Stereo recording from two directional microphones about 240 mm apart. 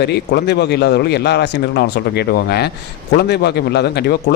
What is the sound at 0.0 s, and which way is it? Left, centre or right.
A man's voice, left.